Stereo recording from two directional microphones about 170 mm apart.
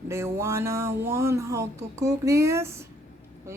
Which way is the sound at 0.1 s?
15° right (ahead or behind).